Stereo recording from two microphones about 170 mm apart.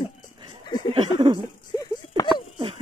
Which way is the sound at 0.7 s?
25° left (ahead or behind).